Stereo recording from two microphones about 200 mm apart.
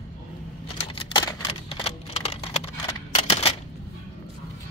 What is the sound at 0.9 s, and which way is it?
Computer keyboard, 25° left (ahead or behind).